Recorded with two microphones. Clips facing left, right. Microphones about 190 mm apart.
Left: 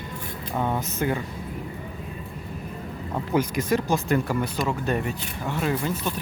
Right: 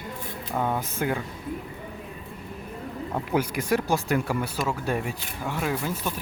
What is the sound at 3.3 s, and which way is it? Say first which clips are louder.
Speech: left 2 dB; 10° right (ahead or behind).